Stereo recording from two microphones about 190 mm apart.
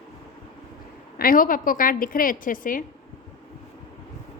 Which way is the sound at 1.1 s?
50° left (ahead or behind).